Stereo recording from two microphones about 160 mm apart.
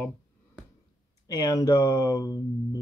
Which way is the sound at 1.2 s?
20° left (ahead or behind).